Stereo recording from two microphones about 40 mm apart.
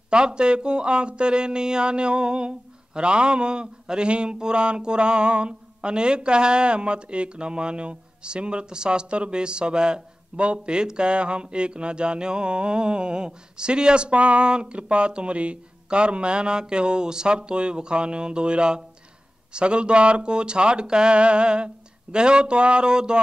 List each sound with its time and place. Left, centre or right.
0.1 s speech: right